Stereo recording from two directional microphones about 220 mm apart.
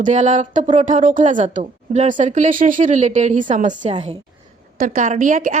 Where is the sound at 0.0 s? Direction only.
35° right (ahead or behind).